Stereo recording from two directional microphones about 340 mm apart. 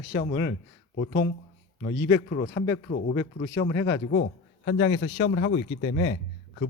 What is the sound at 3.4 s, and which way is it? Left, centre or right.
Speech, left.